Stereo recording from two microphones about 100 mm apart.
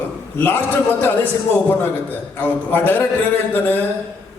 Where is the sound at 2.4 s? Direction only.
20° left (ahead or behind).